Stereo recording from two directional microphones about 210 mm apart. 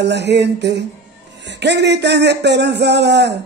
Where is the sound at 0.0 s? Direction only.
55° right (ahead or behind).